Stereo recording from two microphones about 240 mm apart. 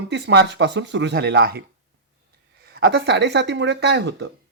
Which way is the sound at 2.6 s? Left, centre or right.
Right.